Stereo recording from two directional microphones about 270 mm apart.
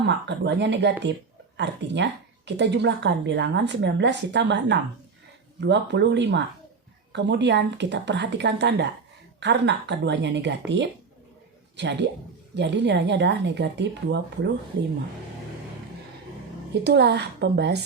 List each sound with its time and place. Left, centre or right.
0.0 s speech: right
16.8 s speech: right